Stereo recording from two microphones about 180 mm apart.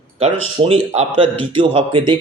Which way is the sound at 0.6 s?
35° right (ahead or behind).